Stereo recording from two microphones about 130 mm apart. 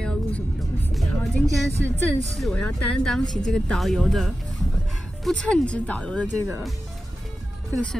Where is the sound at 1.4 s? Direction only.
60° right (ahead or behind).